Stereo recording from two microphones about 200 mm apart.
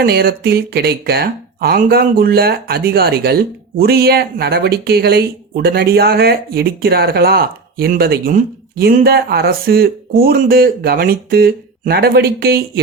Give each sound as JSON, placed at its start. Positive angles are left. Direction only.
{"t": 0.0, "sound": "speech", "side_deg": -50}